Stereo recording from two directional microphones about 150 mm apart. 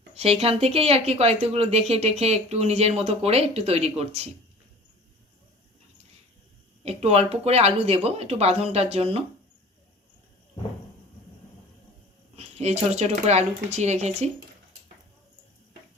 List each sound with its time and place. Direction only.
0.2 s speech: 45° right (ahead or behind)
6.8 s speech: 45° right (ahead or behind)
12.4 s speech: 45° right (ahead or behind)